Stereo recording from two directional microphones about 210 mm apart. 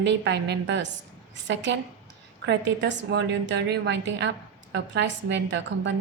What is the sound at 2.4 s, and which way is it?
A woman's voice, 55° right (ahead or behind).